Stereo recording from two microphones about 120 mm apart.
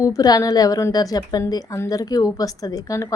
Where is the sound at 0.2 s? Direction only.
30° left (ahead or behind).